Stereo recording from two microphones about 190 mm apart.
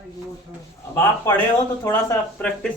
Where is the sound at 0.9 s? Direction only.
10° left (ahead or behind).